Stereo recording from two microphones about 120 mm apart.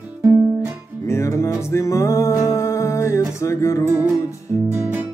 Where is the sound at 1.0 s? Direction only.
25° left (ahead or behind).